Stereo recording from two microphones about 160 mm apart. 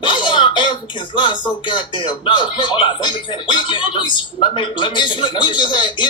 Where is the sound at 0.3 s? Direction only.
30° left (ahead or behind).